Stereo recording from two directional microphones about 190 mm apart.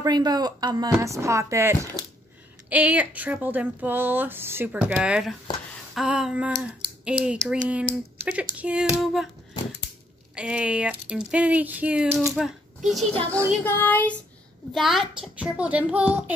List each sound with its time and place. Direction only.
0.0 s speech: 20° right (ahead or behind); by 9.3 s centre (ahead or behind)
10.3 s speech: 5° right (ahead or behind)
12.4 s speech: centre (ahead or behind)
13.7 s child singing: 10° left (ahead or behind)
14.7 s speech: centre (ahead or behind)